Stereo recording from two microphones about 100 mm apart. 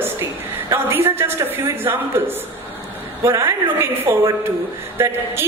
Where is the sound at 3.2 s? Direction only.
30° right (ahead or behind).